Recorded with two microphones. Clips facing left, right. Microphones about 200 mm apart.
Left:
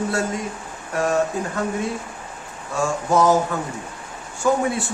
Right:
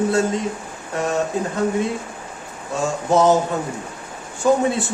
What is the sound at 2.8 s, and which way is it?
Speech, 20° right (ahead or behind).